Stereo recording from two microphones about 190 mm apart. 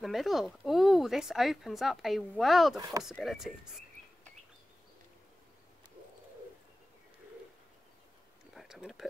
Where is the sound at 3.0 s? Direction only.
Centre (ahead or behind).